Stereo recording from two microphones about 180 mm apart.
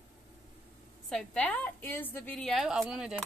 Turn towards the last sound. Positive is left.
turn(degrees=-5)  # may be behind; listen again after turning